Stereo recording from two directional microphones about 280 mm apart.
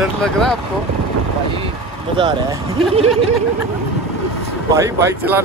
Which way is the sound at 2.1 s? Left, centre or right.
Centre.